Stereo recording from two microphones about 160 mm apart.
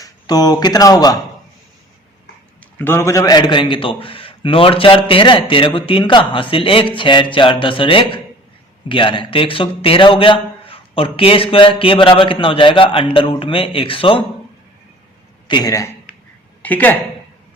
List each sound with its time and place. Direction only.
0.0 s speech: 25° left (ahead or behind)
2.7 s a man's voice: 15° left (ahead or behind); by 14.3 s 35° left (ahead or behind)
15.4 s a man's voice: 25° left (ahead or behind)
16.6 s a woman's voice: 10° left (ahead or behind)